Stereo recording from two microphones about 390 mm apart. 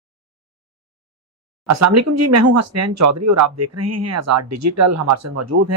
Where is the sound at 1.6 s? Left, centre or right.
Right.